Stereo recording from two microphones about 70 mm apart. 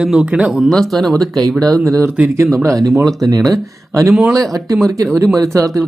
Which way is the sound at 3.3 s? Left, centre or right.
Right.